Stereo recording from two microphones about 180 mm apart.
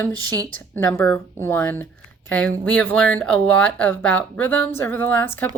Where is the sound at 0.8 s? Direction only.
15° left (ahead or behind).